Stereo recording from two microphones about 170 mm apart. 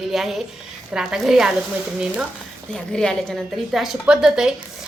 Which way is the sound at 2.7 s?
5° left (ahead or behind).